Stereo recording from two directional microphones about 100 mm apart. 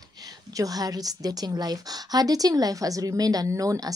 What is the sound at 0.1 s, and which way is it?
A woman's voice, 40° right (ahead or behind).